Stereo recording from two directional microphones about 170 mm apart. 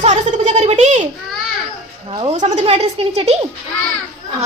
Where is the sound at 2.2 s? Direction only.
40° right (ahead or behind).